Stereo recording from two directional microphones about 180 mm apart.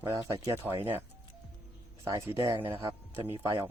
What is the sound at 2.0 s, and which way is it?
Speech, 15° right (ahead or behind).